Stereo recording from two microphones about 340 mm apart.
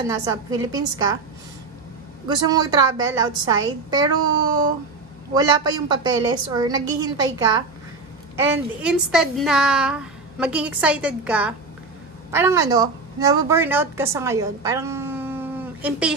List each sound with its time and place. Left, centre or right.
0.1 s a woman's voice: centre
2.2 s a woman's voice: centre
5.3 s a woman's voice: centre
8.4 s a woman's voice: centre